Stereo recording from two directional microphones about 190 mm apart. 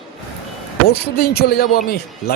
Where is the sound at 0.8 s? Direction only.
55° left (ahead or behind).